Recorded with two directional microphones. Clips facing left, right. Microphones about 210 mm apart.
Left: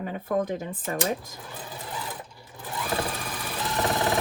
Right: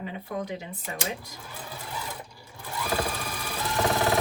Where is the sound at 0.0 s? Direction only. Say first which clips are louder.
Left 6 dB; 45° left (ahead or behind).